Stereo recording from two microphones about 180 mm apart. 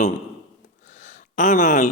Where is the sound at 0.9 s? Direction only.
45° left (ahead or behind).